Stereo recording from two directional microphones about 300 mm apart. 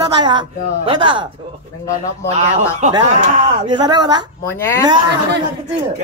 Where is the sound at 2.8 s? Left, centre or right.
Centre.